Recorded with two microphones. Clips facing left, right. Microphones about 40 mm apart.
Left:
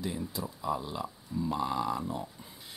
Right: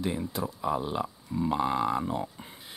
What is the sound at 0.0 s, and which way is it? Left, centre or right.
Speech, right.